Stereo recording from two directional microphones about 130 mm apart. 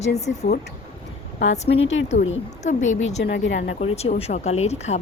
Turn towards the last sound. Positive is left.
turn(degrees=60)  # may be behind; listen again after turning